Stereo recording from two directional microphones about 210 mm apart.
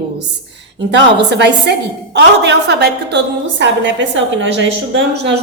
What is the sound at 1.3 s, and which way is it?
A woman's voice, 55° right (ahead or behind).